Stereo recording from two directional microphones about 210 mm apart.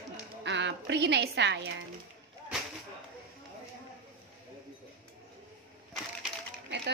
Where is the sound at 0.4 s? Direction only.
55° right (ahead or behind).